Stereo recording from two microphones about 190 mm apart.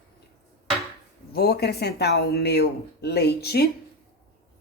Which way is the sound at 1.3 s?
55° left (ahead or behind).